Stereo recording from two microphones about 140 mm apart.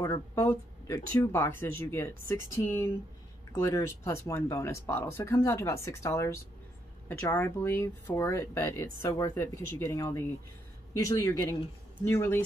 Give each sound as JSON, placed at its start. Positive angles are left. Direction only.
{"t": 0.0, "sound": "speech", "side_deg": 20}